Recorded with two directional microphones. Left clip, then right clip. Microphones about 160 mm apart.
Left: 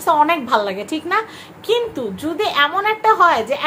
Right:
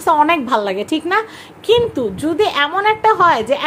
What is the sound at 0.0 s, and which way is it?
A woman's voice, 25° right (ahead or behind).